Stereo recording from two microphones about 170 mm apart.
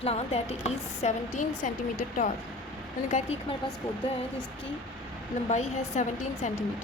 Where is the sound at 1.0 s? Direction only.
50° left (ahead or behind).